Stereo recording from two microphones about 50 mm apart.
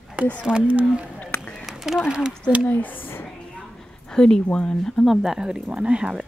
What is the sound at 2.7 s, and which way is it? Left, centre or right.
Speech, left.